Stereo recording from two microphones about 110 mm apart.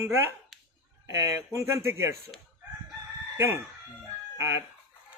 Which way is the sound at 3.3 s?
25° right (ahead or behind).